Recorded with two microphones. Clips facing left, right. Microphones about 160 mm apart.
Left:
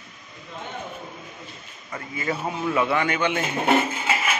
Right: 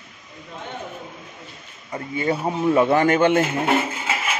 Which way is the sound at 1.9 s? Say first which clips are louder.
Right 5 dB; 30° right (ahead or behind).